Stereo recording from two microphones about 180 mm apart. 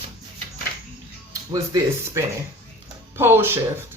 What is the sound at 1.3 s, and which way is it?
Speech, 20° right (ahead or behind).